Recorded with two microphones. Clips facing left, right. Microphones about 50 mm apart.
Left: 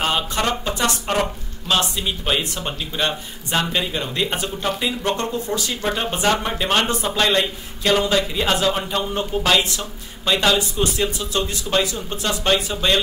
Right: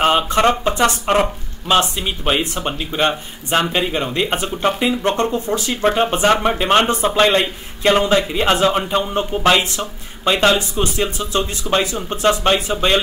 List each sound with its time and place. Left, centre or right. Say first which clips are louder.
0.0 s speech: right 7 dB; right
6.2 s speech: right 4 dB; right
6.6 s speech: right 5 dB; right